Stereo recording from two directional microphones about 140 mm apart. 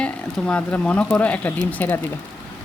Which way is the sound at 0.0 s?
5° left (ahead or behind).